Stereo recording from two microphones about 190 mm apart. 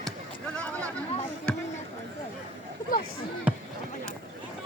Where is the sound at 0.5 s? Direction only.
5° left (ahead or behind).